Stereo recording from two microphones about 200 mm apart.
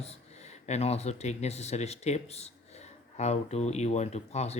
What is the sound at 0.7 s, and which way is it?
Speech, 30° left (ahead or behind).